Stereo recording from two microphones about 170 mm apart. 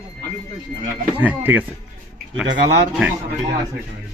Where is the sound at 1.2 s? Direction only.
10° right (ahead or behind).